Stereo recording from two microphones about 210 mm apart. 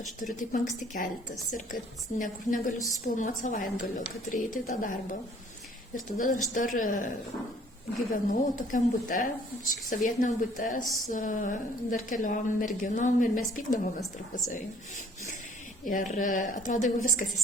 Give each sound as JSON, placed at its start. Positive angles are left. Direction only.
{"t": 0.3, "sound": "a woman's voice", "side_deg": 35}
{"t": 8.1, "sound": "a woman's voice", "side_deg": 40}
{"t": 10.8, "sound": "a sound", "side_deg": 0}
{"t": 11.1, "sound": "a woman's voice", "side_deg": 40}
{"t": 15.9, "sound": "a woman's voice", "side_deg": 40}